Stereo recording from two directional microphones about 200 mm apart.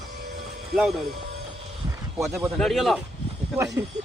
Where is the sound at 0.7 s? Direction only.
Centre (ahead or behind).